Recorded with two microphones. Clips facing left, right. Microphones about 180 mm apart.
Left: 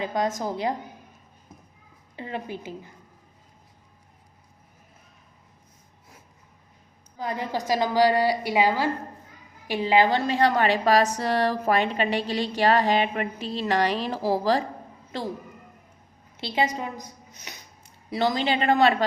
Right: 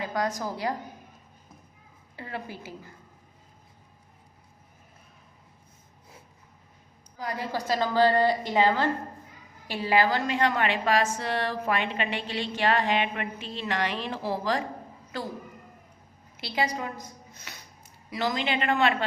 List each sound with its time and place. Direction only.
0.0 s a woman's voice: 20° left (ahead or behind)
2.1 s a woman's voice: 20° left (ahead or behind)
7.2 s a woman's voice: 20° left (ahead or behind); by 14.6 s 35° left (ahead or behind)
16.4 s a woman's voice: 25° left (ahead or behind)
18.1 s a woman's voice: 35° left (ahead or behind)